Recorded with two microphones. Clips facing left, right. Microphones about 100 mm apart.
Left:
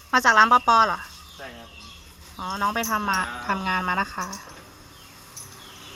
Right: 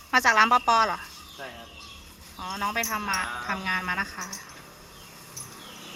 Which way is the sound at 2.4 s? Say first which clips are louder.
Left 4 dB; 30° left (ahead or behind).